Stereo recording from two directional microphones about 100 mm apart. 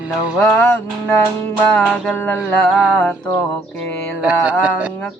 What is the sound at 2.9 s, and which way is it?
Speech, 15° left (ahead or behind).